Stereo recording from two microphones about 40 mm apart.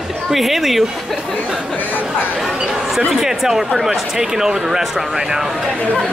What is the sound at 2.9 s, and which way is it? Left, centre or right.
Speech, centre.